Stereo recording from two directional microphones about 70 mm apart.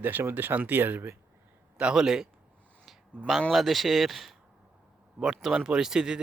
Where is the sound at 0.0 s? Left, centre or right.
Right.